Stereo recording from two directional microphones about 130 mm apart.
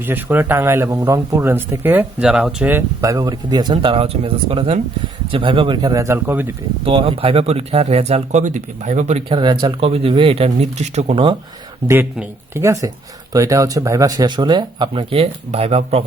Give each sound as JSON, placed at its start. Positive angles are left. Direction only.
{"t": 0.0, "sound": "speech", "side_deg": -15}
{"t": 3.0, "sound": "speech", "side_deg": -25}
{"t": 6.1, "sound": "speech", "side_deg": -15}
{"t": 6.8, "sound": "speech", "side_deg": -45}
{"t": 9.3, "sound": "speech", "side_deg": -35}
{"t": 9.9, "sound": "speech", "side_deg": -45}
{"t": 12.5, "sound": "speech", "side_deg": -25}
{"t": 15.1, "sound": "speech", "side_deg": -50}